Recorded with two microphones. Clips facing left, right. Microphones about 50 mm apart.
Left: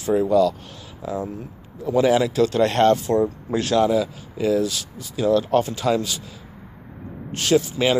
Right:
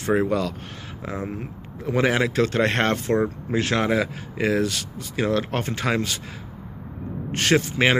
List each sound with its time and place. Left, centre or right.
0.0 s speech: right
7.3 s speech: right